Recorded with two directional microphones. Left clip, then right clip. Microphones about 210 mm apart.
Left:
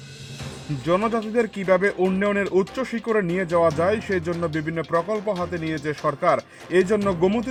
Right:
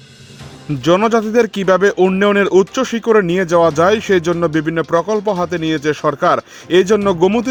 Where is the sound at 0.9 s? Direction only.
45° right (ahead or behind).